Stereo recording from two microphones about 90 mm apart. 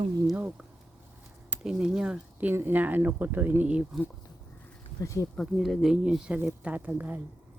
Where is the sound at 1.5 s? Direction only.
10° right (ahead or behind).